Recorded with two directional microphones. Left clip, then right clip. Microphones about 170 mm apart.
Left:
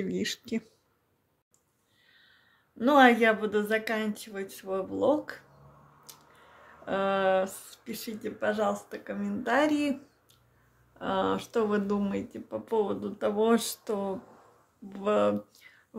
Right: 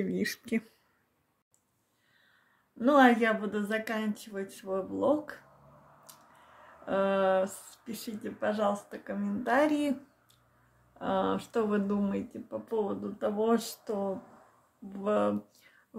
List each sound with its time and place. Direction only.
0.0 s speech: 5° right (ahead or behind)
2.8 s speech: 15° left (ahead or behind)
6.8 s speech: 15° left (ahead or behind)
11.0 s speech: 10° left (ahead or behind)